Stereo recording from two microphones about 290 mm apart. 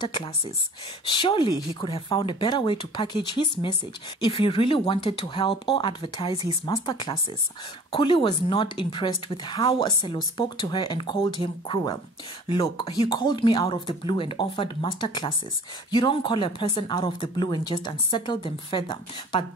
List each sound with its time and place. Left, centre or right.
0.0 s a woman's voice: centre